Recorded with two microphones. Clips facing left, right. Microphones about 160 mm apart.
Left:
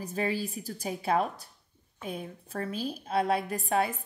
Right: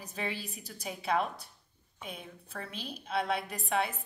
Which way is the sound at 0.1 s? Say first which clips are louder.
Left 7 dB; 40° left (ahead or behind).